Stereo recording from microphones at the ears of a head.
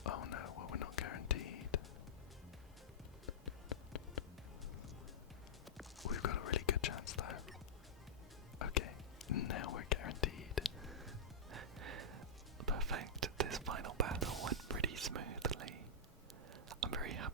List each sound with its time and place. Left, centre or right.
0.0 s whispering: left
3.2 s a sound: left
6.0 s whispering: left
8.5 s whispering: left
11.5 s whispering: right